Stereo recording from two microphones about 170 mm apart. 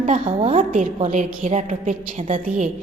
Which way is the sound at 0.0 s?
35° right (ahead or behind).